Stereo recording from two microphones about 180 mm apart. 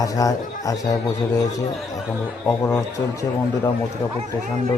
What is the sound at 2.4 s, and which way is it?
A man's voice, 15° left (ahead or behind).